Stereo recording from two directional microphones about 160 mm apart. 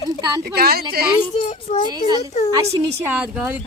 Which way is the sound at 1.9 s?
25° right (ahead or behind).